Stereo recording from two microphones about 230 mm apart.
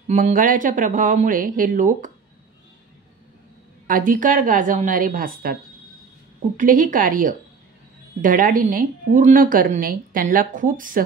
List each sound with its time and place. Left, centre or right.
0.1 s a woman's voice: right
3.8 s a woman's voice: right